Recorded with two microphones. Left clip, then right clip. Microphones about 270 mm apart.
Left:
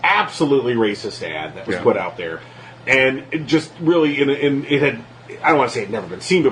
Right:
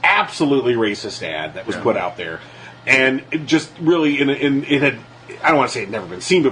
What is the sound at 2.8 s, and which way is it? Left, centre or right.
Speech, right.